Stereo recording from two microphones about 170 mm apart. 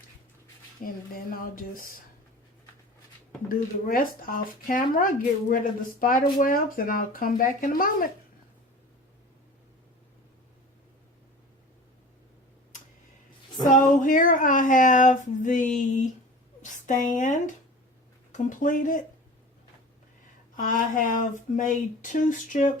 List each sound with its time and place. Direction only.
0.8 s speech: 55° left (ahead or behind)
3.8 s speech: 55° left (ahead or behind)
13.7 s speech: 50° left (ahead or behind)
20.6 s speech: 50° left (ahead or behind)